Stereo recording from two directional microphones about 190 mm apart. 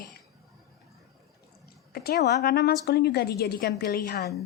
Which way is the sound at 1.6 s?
55° left (ahead or behind).